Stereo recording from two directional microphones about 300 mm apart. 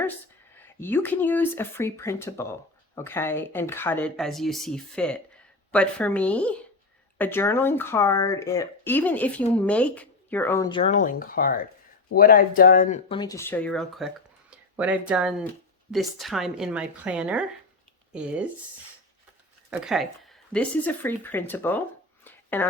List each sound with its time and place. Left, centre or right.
0.6 s a woman's voice: centre
19.8 s speech: centre